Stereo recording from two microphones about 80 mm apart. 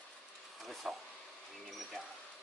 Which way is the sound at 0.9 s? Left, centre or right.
Centre.